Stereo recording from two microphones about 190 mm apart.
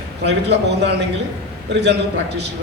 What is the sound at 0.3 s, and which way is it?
A man's voice, 60° right (ahead or behind).